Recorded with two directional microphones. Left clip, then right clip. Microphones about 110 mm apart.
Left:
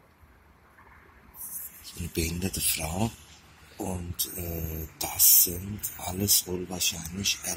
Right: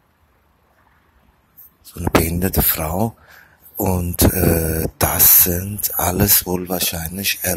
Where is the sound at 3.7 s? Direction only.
40° right (ahead or behind).